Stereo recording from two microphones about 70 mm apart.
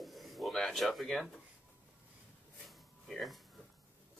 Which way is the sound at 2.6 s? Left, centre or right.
Centre.